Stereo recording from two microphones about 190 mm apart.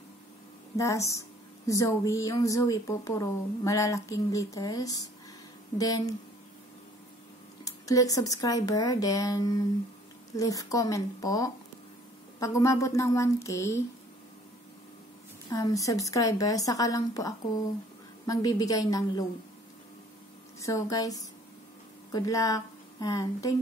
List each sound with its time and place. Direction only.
0.7 s a woman's voice: 15° left (ahead or behind)
7.6 s speech: 20° left (ahead or behind)
15.5 s a woman's voice: 20° left (ahead or behind)
20.6 s a woman's voice: 15° left (ahead or behind)